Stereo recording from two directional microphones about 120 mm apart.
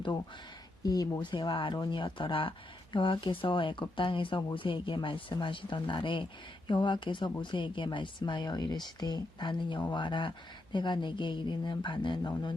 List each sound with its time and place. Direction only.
0.8 s speech: 30° left (ahead or behind)